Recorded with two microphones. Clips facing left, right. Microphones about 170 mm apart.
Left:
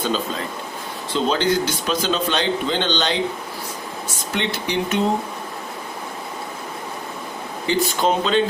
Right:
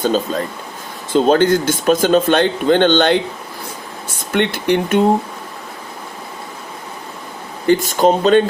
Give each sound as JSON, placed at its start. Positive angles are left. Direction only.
{"t": 0.0, "sound": "speech", "side_deg": -45}
{"t": 4.3, "sound": "speech", "side_deg": -55}
{"t": 7.7, "sound": "speech", "side_deg": -45}